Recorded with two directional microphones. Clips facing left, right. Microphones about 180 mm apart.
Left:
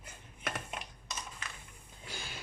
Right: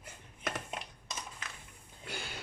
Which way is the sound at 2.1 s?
65° right (ahead or behind).